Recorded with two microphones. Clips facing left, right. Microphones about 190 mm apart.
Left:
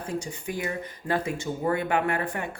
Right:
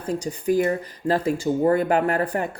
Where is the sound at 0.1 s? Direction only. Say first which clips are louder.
Right 11 dB; 35° right (ahead or behind).